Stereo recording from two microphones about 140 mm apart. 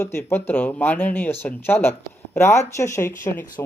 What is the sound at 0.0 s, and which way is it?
Speech, 15° left (ahead or behind).